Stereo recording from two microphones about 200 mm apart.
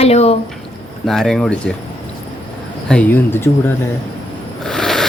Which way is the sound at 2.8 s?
5° left (ahead or behind).